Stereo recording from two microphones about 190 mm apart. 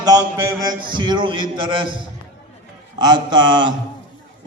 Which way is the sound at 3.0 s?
20° right (ahead or behind).